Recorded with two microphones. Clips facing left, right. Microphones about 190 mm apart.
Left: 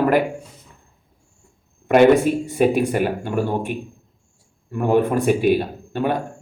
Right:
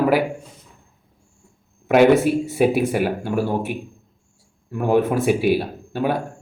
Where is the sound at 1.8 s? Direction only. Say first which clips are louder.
Left 1 dB; centre (ahead or behind).